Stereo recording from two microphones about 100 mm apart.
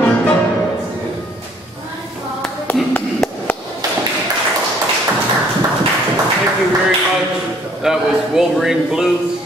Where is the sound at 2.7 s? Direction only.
20° left (ahead or behind).